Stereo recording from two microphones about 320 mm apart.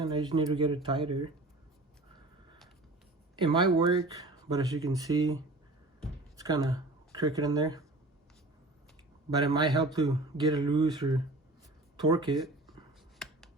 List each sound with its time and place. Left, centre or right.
0.0 s speech: centre
3.4 s speech: centre
9.3 s speech: centre